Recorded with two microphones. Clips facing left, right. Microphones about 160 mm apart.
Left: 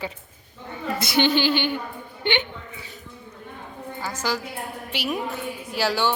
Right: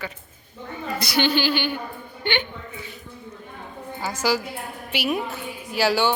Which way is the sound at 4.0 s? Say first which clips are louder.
Right 4 dB; 10° right (ahead or behind).